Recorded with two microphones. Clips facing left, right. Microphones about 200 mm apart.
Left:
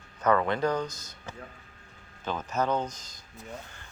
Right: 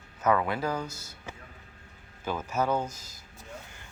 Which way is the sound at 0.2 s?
5° right (ahead or behind).